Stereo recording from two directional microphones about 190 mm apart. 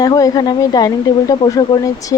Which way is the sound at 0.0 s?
20° left (ahead or behind).